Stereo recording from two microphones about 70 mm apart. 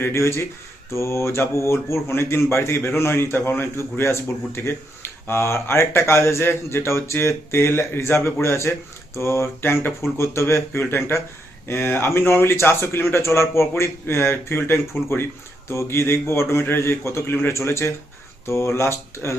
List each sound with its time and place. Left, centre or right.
0.1 s speech: left